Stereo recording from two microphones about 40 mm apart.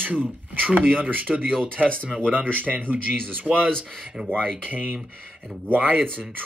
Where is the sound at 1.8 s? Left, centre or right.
Left.